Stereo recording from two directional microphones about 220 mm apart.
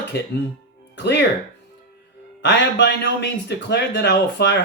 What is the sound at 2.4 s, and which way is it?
A man's voice, 55° left (ahead or behind).